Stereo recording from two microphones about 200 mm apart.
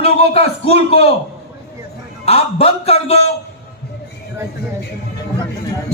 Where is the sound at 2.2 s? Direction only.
30° left (ahead or behind).